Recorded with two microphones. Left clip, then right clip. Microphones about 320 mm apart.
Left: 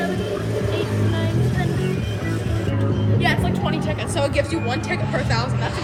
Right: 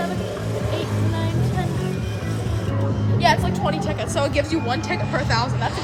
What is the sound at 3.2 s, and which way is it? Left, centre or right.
Music, right.